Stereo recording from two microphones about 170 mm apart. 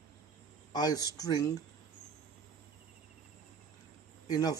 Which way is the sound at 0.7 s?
20° left (ahead or behind).